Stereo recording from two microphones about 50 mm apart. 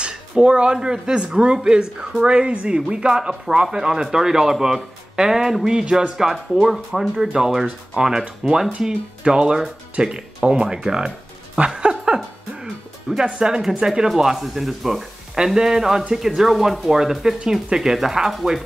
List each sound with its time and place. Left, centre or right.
0.0 s speech: centre
6.3 s speech: centre
11.5 s music: centre
13.2 s speech: centre
13.6 s speech: centre